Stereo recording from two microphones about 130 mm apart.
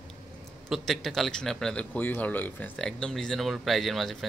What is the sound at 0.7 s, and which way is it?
A man's voice, centre (ahead or behind).